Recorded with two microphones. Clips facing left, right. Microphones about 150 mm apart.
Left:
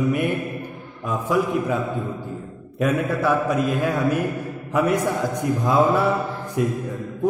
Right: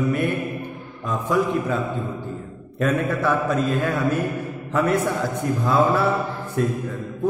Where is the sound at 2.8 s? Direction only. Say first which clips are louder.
Even; 10° left (ahead or behind).